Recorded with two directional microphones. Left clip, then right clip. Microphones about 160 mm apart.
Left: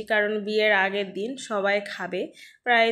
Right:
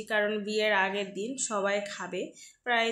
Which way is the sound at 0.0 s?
20° left (ahead or behind).